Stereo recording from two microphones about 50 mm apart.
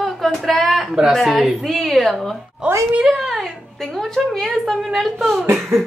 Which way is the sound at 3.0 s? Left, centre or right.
Centre.